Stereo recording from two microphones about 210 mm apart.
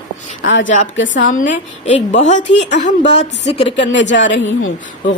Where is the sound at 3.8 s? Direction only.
60° left (ahead or behind).